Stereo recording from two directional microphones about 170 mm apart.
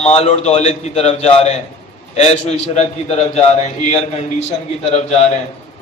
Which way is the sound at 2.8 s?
35° left (ahead or behind).